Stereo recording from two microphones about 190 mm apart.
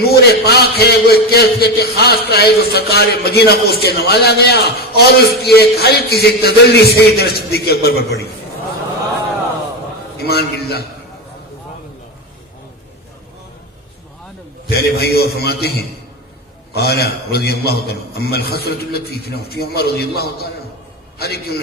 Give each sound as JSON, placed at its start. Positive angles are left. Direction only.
{"t": 0.0, "sound": "a man's voice", "side_deg": 55}
{"t": 10.2, "sound": "a man's voice", "side_deg": 55}
{"t": 14.7, "sound": "a man's voice", "side_deg": 55}